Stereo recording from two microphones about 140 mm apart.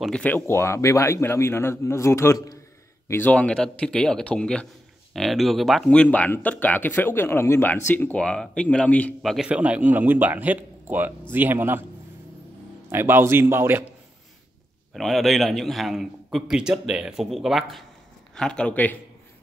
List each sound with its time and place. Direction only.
0.0 s speech: 10° left (ahead or behind); by 2.6 s 25° left (ahead or behind)
3.1 s speech: 10° left (ahead or behind)
9.5 s a man's voice: 10° right (ahead or behind)
12.9 s a man's voice: 15° right (ahead or behind)
15.0 s a man's voice: centre (ahead or behind)